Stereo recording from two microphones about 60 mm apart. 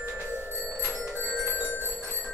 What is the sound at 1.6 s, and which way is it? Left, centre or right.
Music, left.